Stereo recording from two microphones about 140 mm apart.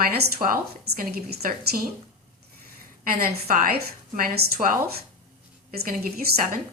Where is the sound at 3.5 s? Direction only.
90° right.